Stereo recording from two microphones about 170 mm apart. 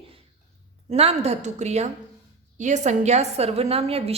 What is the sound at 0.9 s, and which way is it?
Speech, 40° right (ahead or behind).